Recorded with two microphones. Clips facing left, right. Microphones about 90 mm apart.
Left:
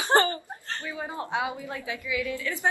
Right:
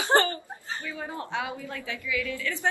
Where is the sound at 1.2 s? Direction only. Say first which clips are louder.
Left 3 dB; 20° left (ahead or behind).